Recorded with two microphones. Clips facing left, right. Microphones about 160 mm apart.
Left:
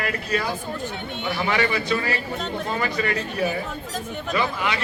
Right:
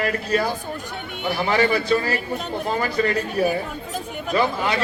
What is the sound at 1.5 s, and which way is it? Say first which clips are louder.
Speech: right 5 dB; 35° right (ahead or behind).